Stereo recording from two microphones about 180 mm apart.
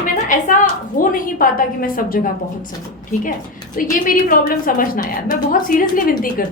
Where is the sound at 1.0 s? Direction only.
50° left (ahead or behind).